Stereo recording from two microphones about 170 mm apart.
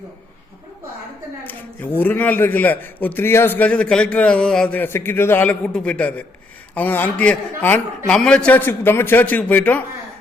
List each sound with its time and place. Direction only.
2.0 s a man's voice: 10° left (ahead or behind)